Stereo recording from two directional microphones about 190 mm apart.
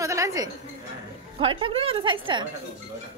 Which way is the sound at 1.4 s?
30° right (ahead or behind).